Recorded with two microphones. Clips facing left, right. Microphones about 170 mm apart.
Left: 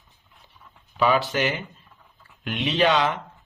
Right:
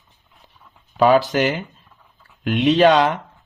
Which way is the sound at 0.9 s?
45° right (ahead or behind).